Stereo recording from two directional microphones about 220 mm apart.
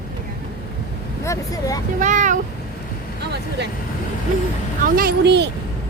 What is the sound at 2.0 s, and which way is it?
Speech, 35° right (ahead or behind).